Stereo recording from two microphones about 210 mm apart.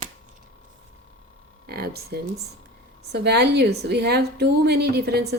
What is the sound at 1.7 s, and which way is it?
A woman's voice, 50° right (ahead or behind).